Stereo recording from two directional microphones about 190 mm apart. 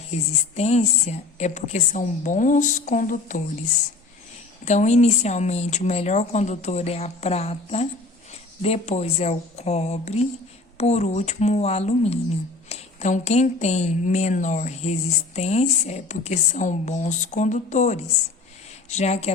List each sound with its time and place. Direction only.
0.1 s speech: 35° left (ahead or behind)